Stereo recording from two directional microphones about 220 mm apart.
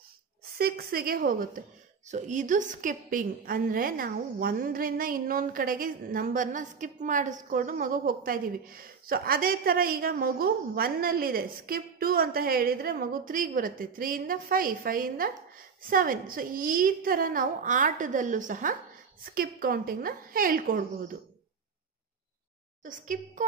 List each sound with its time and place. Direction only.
0.6 s a woman's voice: 45° right (ahead or behind)
22.8 s a woman's voice: 35° right (ahead or behind)